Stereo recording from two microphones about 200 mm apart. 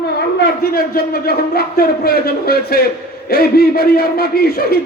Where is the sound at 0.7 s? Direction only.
50° left (ahead or behind).